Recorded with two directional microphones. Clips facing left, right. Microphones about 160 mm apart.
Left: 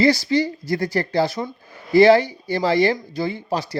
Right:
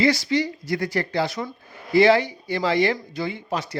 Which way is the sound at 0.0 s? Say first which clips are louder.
Left 3 dB; 35° left (ahead or behind).